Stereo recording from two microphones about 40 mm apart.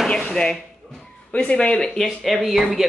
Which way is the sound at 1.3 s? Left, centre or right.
Left.